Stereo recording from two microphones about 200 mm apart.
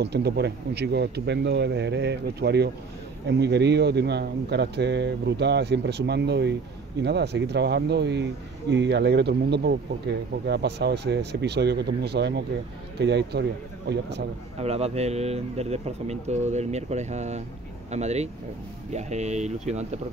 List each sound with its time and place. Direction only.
0.0 s speech: 55° right (ahead or behind)
14.6 s speech: 30° right (ahead or behind)